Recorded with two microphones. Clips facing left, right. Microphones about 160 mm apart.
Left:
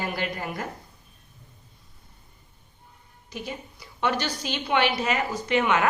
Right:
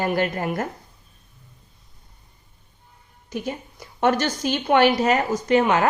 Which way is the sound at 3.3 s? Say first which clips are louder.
Right 6 dB; 45° right (ahead or behind).